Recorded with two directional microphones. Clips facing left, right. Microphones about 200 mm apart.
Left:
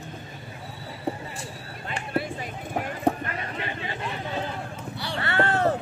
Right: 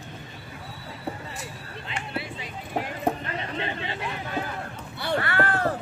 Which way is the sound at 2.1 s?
50° left (ahead or behind).